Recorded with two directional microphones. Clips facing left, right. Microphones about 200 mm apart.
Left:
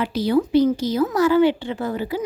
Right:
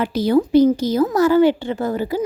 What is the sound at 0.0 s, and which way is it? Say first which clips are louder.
A woman's voice: right 3 dB; 45° right (ahead or behind).